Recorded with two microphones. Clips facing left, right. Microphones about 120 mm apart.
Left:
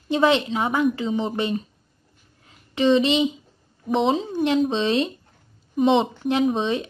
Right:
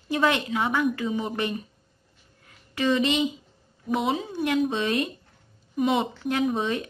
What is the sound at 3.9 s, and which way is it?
A woman's voice, 25° left (ahead or behind).